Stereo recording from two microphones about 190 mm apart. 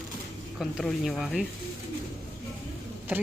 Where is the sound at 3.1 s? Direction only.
5° right (ahead or behind).